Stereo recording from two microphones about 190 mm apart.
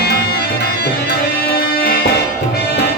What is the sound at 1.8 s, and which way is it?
Music, 55° left (ahead or behind).